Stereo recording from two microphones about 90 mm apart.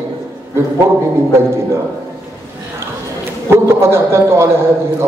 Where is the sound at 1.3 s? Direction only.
30° right (ahead or behind).